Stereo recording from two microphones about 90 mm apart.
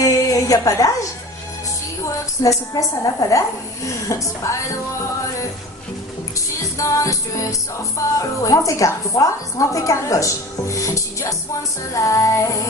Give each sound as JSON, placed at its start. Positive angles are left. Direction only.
{"t": 0.0, "sound": "a sound", "side_deg": 40}
{"t": 2.4, "sound": "a woman's voice", "side_deg": 40}
{"t": 6.3, "sound": "music", "side_deg": 35}
{"t": 7.9, "sound": "a woman's voice", "side_deg": 35}